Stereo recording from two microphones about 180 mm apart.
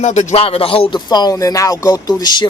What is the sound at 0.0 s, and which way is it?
Speech, 40° left (ahead or behind).